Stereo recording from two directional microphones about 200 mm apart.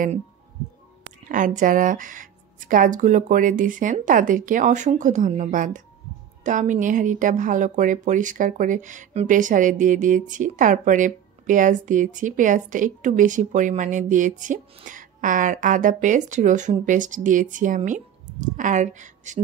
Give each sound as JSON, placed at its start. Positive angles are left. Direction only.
{"t": 1.3, "sound": "a woman's voice", "side_deg": -40}